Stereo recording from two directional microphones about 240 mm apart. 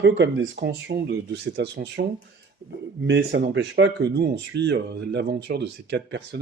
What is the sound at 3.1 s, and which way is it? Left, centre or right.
Speech, right.